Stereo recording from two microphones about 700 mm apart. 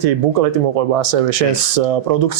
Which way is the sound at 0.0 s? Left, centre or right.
Right.